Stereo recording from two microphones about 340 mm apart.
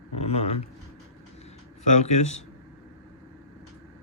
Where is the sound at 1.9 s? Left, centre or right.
Left.